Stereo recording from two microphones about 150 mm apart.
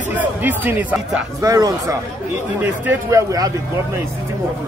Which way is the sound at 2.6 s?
10° right (ahead or behind).